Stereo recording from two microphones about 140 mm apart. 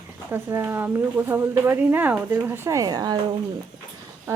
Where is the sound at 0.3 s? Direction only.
15° right (ahead or behind).